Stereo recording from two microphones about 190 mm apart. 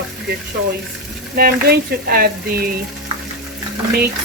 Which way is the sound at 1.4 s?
55° right (ahead or behind).